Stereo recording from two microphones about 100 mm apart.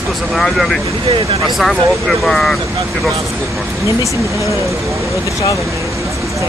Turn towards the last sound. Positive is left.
turn(degrees=30)  # may be behind; listen again after turning